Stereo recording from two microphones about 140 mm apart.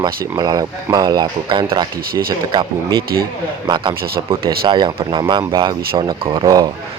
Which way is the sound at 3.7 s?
35° right (ahead or behind).